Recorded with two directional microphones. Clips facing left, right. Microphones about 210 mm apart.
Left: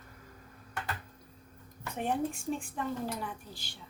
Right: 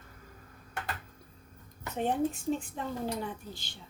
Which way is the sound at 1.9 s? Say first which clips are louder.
Right 3 dB; 20° right (ahead or behind).